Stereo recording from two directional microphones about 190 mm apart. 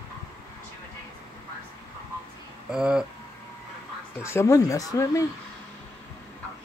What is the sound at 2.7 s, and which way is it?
Speech, 5° right (ahead or behind).